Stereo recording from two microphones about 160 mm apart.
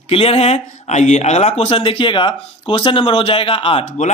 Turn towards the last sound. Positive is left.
turn(degrees=35)  # may be behind; listen again after turning